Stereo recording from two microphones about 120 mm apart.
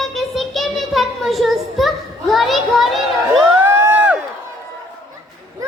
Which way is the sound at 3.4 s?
20° right (ahead or behind).